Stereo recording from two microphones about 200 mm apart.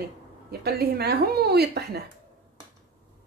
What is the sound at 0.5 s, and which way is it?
Speech, 50° right (ahead or behind).